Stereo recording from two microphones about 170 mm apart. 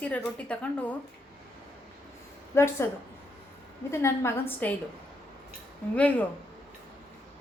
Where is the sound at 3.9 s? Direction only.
15° left (ahead or behind).